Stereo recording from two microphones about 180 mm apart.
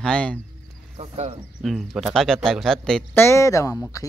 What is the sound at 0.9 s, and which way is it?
Speech, 35° right (ahead or behind).